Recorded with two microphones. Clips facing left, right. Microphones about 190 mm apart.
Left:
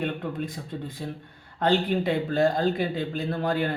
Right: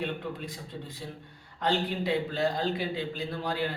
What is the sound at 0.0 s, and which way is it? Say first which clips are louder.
A man's voice: left 5 dB; 50° left (ahead or behind).